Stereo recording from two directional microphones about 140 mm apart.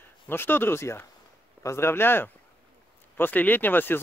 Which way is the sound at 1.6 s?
20° left (ahead or behind).